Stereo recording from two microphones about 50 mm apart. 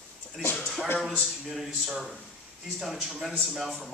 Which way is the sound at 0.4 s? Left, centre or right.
Left.